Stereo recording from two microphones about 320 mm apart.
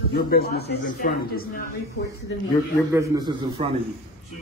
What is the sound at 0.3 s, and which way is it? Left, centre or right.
Speech, left.